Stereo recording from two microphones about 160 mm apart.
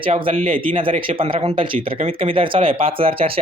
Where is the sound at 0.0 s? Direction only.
35° right (ahead or behind).